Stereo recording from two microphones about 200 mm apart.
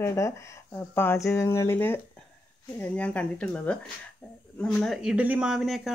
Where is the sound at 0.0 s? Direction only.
15° left (ahead or behind).